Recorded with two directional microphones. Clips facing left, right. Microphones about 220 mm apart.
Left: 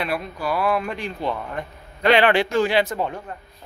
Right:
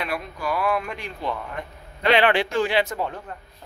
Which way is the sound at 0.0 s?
35° left (ahead or behind).